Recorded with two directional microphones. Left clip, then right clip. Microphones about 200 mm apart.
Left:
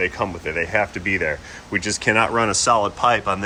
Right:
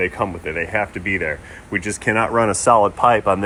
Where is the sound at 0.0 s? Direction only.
5° left (ahead or behind).